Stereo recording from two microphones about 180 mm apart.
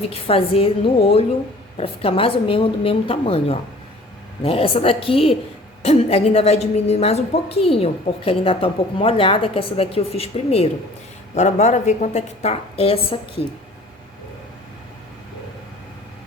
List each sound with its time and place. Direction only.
0.1 s a woman's voice: 30° left (ahead or behind)